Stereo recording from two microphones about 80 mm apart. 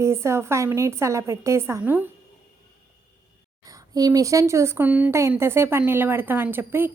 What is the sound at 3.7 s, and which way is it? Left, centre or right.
A woman's voice, right.